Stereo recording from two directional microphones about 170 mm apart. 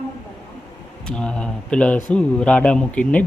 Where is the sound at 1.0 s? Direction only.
5° left (ahead or behind).